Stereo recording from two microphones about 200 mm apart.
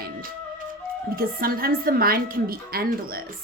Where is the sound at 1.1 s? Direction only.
45° right (ahead or behind).